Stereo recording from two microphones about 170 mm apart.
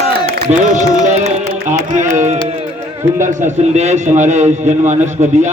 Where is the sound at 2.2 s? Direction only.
45° right (ahead or behind).